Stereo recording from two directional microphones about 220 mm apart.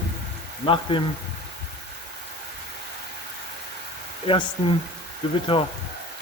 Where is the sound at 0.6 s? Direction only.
25° left (ahead or behind).